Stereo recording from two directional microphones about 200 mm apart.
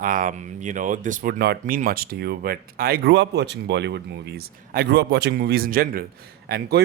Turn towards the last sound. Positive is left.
turn(degrees=-50)  # may be behind; listen again after turning